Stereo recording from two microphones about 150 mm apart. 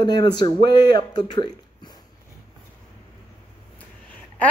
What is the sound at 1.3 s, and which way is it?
Speech, 30° left (ahead or behind).